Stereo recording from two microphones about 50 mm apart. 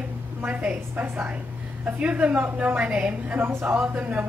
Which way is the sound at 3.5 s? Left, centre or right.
Right.